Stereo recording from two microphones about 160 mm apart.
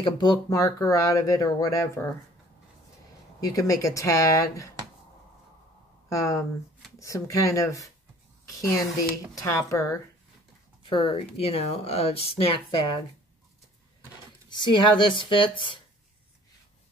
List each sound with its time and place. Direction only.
0.0 s speech: 25° left (ahead or behind)
3.3 s speech: 20° left (ahead or behind)
6.0 s a woman's voice: 20° left (ahead or behind)
10.8 s speech: 30° left (ahead or behind)
14.5 s speech: 30° left (ahead or behind)